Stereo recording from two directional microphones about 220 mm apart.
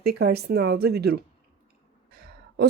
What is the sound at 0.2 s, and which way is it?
Speech, 45° right (ahead or behind).